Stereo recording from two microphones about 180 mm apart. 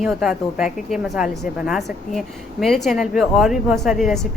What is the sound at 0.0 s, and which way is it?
A woman's voice, 5° right (ahead or behind).